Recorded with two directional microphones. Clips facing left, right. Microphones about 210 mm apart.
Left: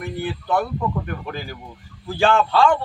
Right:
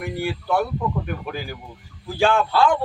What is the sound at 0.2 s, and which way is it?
A man's voice, 10° right (ahead or behind).